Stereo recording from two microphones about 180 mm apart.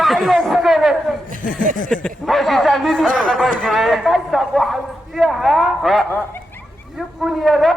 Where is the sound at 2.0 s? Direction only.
Centre (ahead or behind).